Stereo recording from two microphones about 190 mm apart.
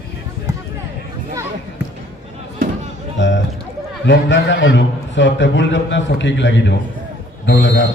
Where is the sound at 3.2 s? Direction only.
75° left (ahead or behind).